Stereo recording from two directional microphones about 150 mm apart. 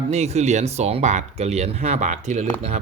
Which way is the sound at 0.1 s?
45° right (ahead or behind).